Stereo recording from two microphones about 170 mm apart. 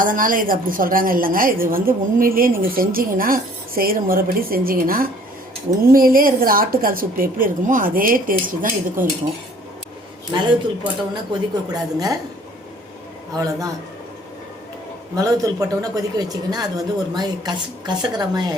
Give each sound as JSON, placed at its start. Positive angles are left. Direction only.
{"t": 0.0, "sound": "a woman's voice", "side_deg": -55}
{"t": 11.1, "sound": "speech", "side_deg": -25}
{"t": 13.3, "sound": "speech", "side_deg": -20}
{"t": 15.1, "sound": "speech", "side_deg": -20}